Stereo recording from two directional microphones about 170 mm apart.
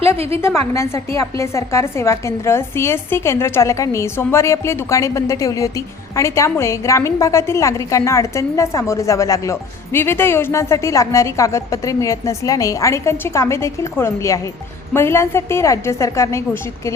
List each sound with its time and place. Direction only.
0.7 s a woman's voice: 20° left (ahead or behind)